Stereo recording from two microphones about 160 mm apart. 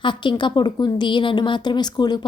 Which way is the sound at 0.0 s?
30° left (ahead or behind).